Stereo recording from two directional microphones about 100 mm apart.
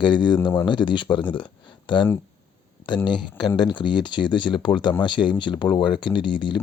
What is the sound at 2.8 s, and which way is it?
Speech, 50° left (ahead or behind).